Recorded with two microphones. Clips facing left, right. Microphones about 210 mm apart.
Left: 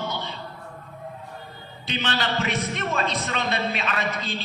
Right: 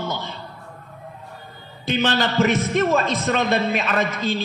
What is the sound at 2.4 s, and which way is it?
A man's voice, 45° right (ahead or behind).